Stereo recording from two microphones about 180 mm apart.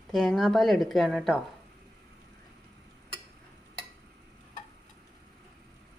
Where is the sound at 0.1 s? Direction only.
Centre (ahead or behind).